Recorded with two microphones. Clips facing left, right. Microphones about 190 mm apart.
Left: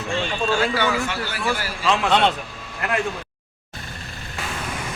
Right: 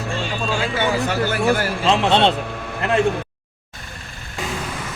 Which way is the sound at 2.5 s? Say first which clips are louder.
Right 9 dB; 60° right (ahead or behind).